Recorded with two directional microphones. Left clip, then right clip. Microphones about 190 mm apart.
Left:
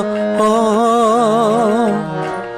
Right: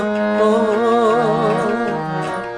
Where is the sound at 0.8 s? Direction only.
55° left (ahead or behind).